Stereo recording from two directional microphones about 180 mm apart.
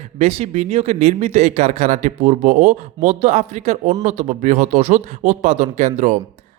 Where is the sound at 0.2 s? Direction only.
35° right (ahead or behind).